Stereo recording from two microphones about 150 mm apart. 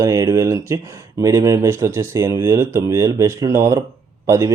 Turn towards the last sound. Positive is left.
turn(degrees=-20)  # may be behind; listen again after turning